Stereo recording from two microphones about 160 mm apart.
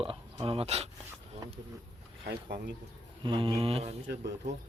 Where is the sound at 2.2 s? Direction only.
90° right.